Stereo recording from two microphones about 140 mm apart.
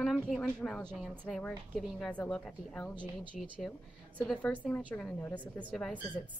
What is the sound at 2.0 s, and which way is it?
A woman's voice, 5° left (ahead or behind).